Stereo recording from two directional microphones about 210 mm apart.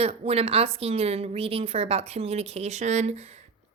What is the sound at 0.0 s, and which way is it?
A woman's voice, 30° right (ahead or behind).